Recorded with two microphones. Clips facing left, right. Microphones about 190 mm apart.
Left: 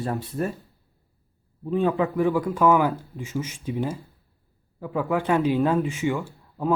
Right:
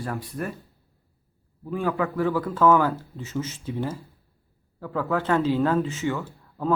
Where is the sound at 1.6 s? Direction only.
20° left (ahead or behind).